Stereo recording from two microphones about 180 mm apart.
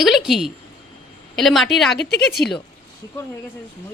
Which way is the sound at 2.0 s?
65° left (ahead or behind).